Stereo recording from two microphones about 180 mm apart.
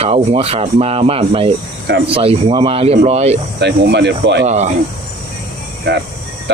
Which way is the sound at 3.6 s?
70° right (ahead or behind).